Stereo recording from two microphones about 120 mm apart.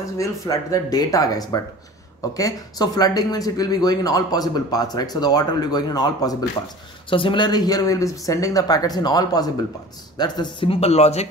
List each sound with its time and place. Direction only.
0.2 s speech: 30° left (ahead or behind)
7.1 s speech: 45° left (ahead or behind); by 11.2 s 60° left (ahead or behind)